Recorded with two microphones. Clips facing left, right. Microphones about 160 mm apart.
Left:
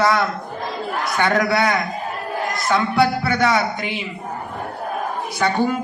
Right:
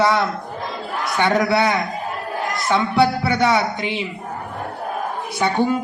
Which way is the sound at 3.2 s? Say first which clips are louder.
Right 1 dB; 25° right (ahead or behind).